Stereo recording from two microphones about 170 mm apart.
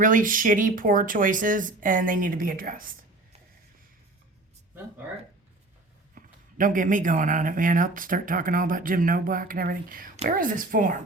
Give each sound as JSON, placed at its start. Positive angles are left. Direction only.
{"t": 0.0, "sound": "speech", "side_deg": -50}
{"t": 6.1, "sound": "a woman's voice", "side_deg": -50}